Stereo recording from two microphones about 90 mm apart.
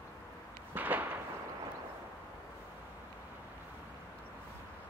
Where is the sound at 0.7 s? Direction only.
20° right (ahead or behind).